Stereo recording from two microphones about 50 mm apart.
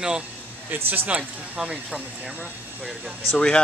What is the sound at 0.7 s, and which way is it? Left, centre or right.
Speech, right.